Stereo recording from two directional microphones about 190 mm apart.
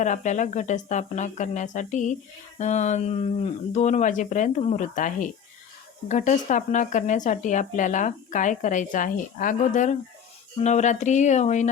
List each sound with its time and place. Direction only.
0.0 s a woman's voice: 40° left (ahead or behind)